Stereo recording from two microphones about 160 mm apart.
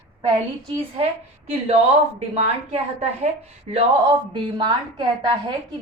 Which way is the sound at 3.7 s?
30° right (ahead or behind).